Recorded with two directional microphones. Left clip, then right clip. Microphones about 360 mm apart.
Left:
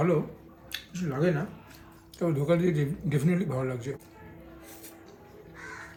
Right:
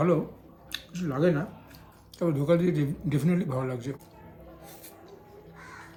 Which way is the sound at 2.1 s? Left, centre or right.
Centre.